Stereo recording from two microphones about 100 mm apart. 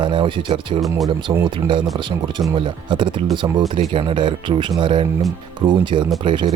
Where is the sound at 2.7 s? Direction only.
50° right (ahead or behind).